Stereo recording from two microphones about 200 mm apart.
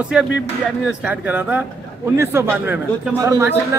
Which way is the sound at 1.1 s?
5° right (ahead or behind).